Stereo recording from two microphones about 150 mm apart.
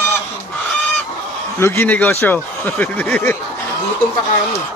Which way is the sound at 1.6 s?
15° left (ahead or behind).